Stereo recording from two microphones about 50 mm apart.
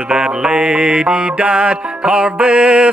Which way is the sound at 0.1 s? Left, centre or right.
Centre.